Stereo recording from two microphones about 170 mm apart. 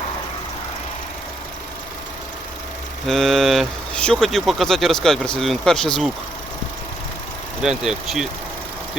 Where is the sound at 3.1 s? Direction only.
Centre (ahead or behind).